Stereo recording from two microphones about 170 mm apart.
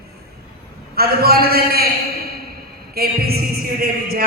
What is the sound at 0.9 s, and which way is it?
Speech, 65° right (ahead or behind).